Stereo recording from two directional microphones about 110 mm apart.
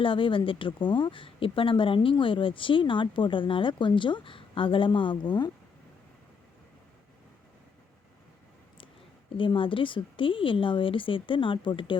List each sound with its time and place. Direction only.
0.0 s speech: 50° left (ahead or behind)
9.3 s speech: 50° left (ahead or behind)